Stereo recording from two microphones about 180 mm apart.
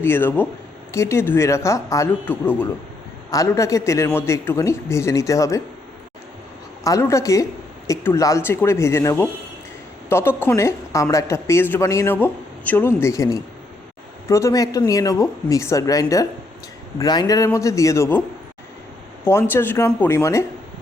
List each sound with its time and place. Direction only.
0.0 s a woman's voice: 10° left (ahead or behind)
6.8 s a woman's voice: 15° left (ahead or behind)
19.2 s a woman's voice: 15° left (ahead or behind)